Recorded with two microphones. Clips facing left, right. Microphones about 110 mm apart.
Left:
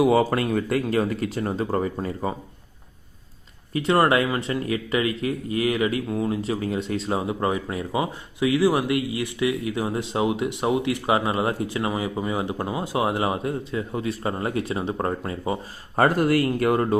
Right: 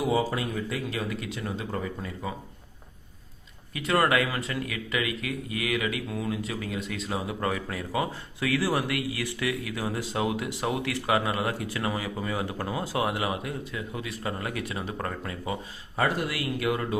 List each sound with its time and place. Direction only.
0.0 s speech: 65° left (ahead or behind); by 2.3 s 40° left (ahead or behind)
3.7 s speech: 30° left (ahead or behind)
16.0 s speech: 50° left (ahead or behind)